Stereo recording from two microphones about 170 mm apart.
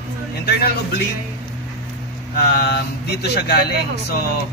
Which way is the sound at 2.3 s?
70° left (ahead or behind).